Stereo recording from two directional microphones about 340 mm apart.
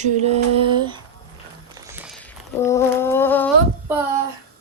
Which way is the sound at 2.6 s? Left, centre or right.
Centre.